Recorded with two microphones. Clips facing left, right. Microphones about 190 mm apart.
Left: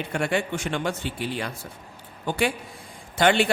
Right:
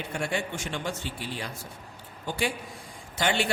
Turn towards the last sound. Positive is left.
turn(degrees=60)  # may be behind; listen again after turning